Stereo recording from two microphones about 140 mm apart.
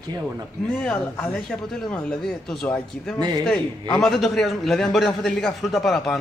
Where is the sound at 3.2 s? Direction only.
30° right (ahead or behind).